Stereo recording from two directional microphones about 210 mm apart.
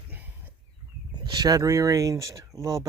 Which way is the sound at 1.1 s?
20° right (ahead or behind).